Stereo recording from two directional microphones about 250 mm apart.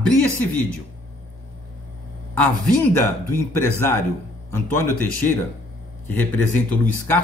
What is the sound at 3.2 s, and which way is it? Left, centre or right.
A man's voice, centre.